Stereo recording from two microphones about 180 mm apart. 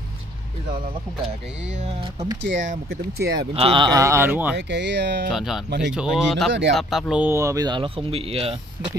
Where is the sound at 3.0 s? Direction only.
65° right (ahead or behind).